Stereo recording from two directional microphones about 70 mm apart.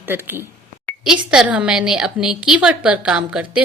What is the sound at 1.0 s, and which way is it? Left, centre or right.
Speech, centre.